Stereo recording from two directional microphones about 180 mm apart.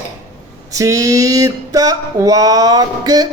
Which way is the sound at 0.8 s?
20° right (ahead or behind).